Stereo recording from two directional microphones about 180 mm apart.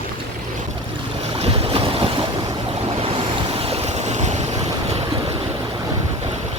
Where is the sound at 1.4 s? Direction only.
35° right (ahead or behind).